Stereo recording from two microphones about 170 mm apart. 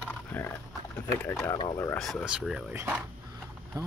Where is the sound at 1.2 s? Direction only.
10° left (ahead or behind).